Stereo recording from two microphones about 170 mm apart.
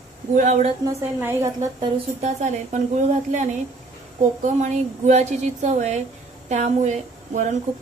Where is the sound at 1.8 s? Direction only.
40° right (ahead or behind).